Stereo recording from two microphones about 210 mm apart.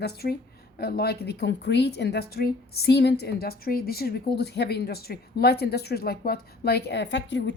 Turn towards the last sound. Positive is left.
turn(degrees=55)  # may be behind; listen again after turning